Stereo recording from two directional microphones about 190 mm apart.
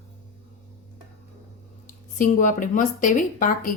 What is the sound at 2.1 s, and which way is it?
Speech, 45° left (ahead or behind).